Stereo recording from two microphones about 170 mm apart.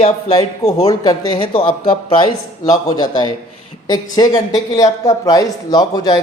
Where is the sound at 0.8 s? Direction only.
20° left (ahead or behind).